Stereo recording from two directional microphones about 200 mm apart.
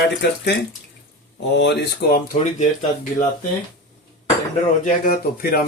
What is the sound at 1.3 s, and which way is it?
Speech, 60° left (ahead or behind).